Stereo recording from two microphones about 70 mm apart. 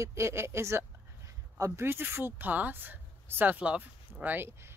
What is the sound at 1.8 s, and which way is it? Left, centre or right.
Speech, right.